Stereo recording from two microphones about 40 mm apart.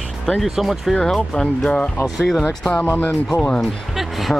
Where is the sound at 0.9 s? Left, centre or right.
Centre.